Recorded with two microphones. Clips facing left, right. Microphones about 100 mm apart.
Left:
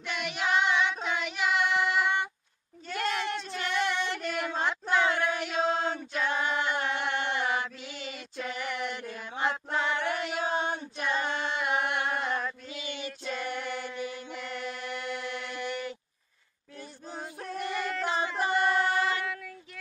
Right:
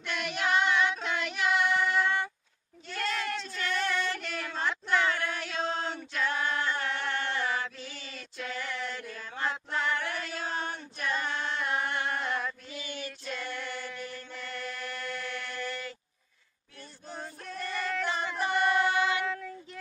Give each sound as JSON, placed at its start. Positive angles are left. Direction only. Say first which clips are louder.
{"t": 0.0, "sound": "child singing", "louder": "even", "side_deg": 10}
{"t": 3.4, "sound": "female singing", "louder": "left 2 dB", "side_deg": 15}
{"t": 5.9, "sound": "chant", "louder": "left 1 dB", "side_deg": 15}
{"t": 9.1, "sound": "mantra", "louder": "left 4 dB", "side_deg": 15}
{"t": 9.5, "sound": "choir", "louder": "left 1 dB", "side_deg": 10}
{"t": 11.2, "sound": "music", "louder": "left 2 dB", "side_deg": 15}
{"t": 12.8, "sound": "child singing", "louder": "left 2 dB", "side_deg": 20}
{"t": 13.3, "sound": "chant", "louder": "left 4 dB", "side_deg": 15}
{"t": 17.6, "sound": "a sound", "louder": "left 2 dB", "side_deg": 15}
{"t": 18.4, "sound": "singing", "louder": "even", "side_deg": 5}